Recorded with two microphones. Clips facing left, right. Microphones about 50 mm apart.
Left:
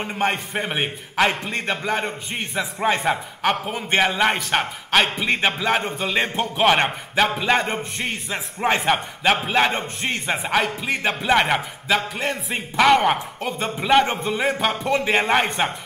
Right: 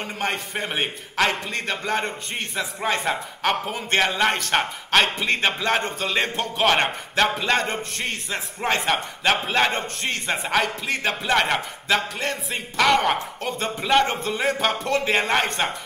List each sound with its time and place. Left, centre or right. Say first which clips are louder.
0.0 s a man's voice: left 4 dB; centre